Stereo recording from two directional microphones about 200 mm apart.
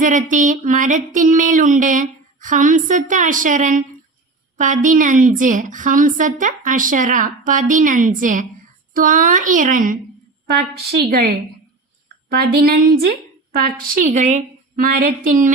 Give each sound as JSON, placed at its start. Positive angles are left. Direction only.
{"t": 0.0, "sound": "a woman's voice", "side_deg": -40}
{"t": 10.4, "sound": "a woman's voice", "side_deg": -55}
{"t": 12.3, "sound": "a woman's voice", "side_deg": -50}